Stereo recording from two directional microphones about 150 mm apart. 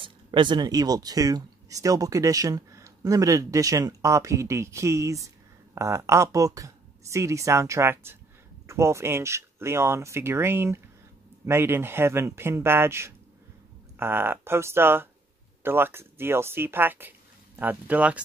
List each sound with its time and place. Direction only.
0.0 s speech: 30° right (ahead or behind); by 18.2 s 10° right (ahead or behind)